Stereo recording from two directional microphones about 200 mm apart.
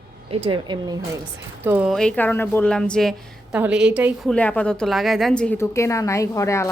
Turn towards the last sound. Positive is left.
turn(degrees=15)  # may be behind; listen again after turning